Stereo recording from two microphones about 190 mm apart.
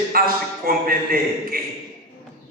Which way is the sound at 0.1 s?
50° right (ahead or behind).